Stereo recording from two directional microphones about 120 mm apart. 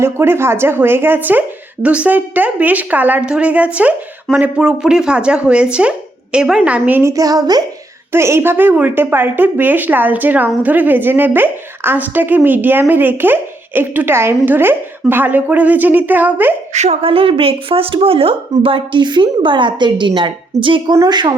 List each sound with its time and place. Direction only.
0.0 s a woman's voice: 20° right (ahead or behind)
7.1 s a woman's voice: 30° right (ahead or behind)
8.1 s a woman's voice: 20° right (ahead or behind)
16.7 s a woman's voice: 70° right (ahead or behind)
17.0 s a woman's voice: 50° right (ahead or behind)
20.9 s a woman's voice: 30° right (ahead or behind)